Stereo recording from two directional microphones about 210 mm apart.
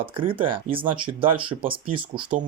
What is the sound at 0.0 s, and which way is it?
Speech, 25° right (ahead or behind).